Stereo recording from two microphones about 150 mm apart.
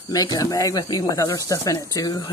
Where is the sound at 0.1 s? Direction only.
25° left (ahead or behind).